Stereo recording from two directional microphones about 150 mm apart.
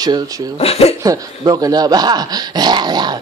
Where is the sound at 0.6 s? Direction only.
40° left (ahead or behind).